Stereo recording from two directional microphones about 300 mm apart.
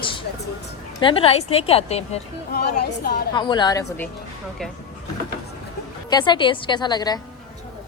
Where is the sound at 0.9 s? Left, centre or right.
Centre.